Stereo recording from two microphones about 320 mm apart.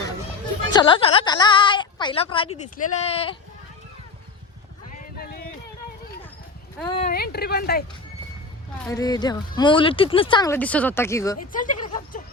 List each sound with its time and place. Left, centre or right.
0.7 s a woman's voice: centre
4.9 s clip-clop: left
6.8 s speech: left
8.9 s speech: centre
11.3 s speech: left